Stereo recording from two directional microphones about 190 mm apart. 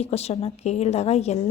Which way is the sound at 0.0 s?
35° left (ahead or behind).